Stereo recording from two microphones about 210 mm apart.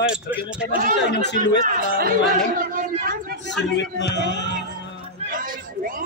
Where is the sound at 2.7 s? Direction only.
40° right (ahead or behind).